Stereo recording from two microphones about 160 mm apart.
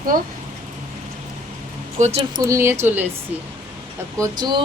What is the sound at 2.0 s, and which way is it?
Speech, 45° right (ahead or behind).